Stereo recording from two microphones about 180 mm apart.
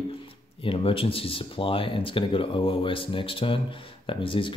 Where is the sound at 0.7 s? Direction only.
30° left (ahead or behind).